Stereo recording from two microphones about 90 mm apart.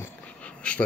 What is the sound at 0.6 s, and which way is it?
Speech, 15° left (ahead or behind).